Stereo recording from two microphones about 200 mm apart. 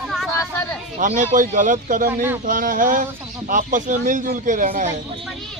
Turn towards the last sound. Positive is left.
turn(degrees=-40)  # may be behind; listen again after turning